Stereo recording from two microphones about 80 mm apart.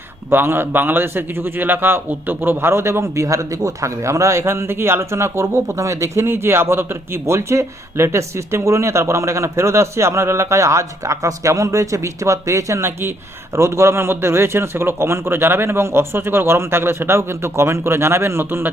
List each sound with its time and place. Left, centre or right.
0.3 s a man's voice: right